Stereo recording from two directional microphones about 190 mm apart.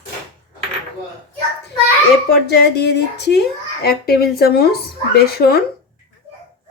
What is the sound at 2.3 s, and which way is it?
A child's voice, 60° left (ahead or behind).